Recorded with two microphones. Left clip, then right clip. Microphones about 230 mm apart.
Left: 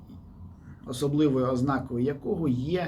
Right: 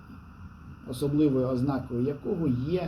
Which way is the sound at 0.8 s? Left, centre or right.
Centre.